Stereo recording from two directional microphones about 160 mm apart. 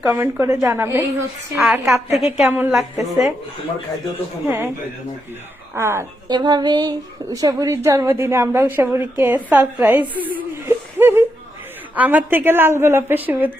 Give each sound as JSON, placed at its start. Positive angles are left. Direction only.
{"t": 0.0, "sound": "a woman's voice", "side_deg": -15}
{"t": 2.4, "sound": "a woman's voice", "side_deg": -5}
{"t": 4.4, "sound": "a woman's voice", "side_deg": -15}
{"t": 5.7, "sound": "a woman's voice", "side_deg": -15}
{"t": 10.2, "sound": "a sound", "side_deg": -10}
{"t": 11.9, "sound": "a woman's voice", "side_deg": -10}